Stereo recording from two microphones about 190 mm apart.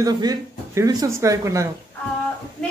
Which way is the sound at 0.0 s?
20° right (ahead or behind).